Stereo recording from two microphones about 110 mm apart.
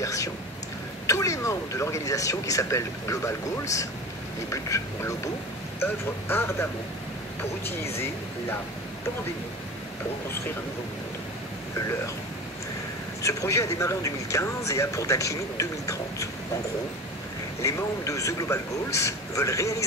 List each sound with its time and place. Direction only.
0.0 s speech: 30° left (ahead or behind)
13.2 s speech: 30° left (ahead or behind)
17.6 s speech: 30° left (ahead or behind)